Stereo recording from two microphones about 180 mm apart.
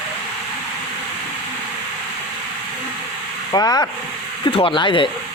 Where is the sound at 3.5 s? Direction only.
20° left (ahead or behind).